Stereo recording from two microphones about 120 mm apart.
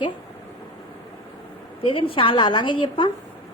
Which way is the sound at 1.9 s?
45° left (ahead or behind).